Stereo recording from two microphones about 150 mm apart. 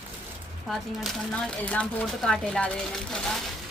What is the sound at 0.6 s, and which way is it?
Speech, centre (ahead or behind).